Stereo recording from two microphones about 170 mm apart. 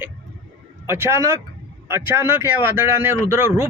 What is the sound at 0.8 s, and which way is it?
Speech, 15° right (ahead or behind).